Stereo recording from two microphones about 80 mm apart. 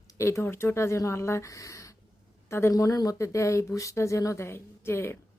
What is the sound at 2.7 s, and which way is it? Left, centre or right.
A woman's voice, left.